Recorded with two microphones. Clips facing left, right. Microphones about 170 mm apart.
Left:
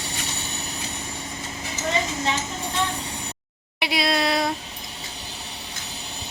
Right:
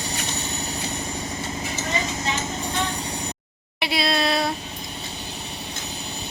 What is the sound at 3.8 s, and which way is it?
Speech, 15° left (ahead or behind).